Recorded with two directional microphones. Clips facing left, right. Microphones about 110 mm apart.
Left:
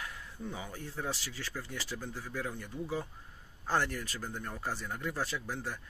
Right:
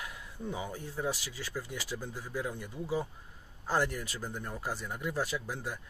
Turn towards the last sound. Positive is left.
turn(degrees=-15)  # may be behind; listen again after turning